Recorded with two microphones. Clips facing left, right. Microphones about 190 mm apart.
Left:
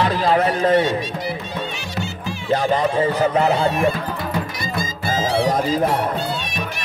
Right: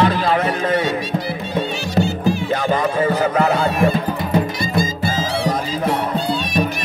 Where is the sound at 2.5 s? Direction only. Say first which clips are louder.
Even; 35° left (ahead or behind).